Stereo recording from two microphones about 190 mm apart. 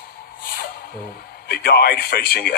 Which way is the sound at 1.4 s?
55° left (ahead or behind).